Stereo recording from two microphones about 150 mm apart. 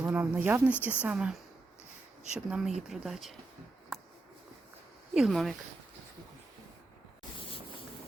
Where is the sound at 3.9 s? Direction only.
Centre (ahead or behind).